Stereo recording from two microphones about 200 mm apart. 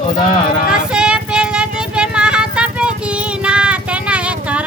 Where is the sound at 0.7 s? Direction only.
5° right (ahead or behind).